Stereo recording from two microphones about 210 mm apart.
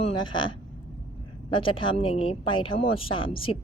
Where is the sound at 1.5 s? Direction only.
25° left (ahead or behind).